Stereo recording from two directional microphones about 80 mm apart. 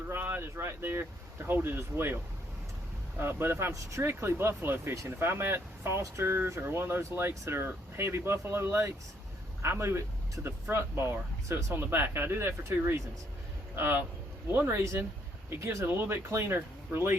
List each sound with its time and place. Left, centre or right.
0.1 s speech: right
3.2 s speech: right